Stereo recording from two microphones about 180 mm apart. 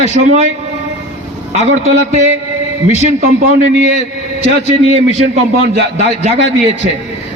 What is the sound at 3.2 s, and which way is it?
A man's voice, 40° right (ahead or behind).